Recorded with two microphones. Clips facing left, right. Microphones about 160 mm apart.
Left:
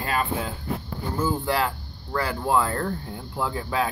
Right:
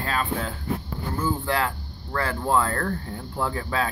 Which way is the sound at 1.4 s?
15° left (ahead or behind).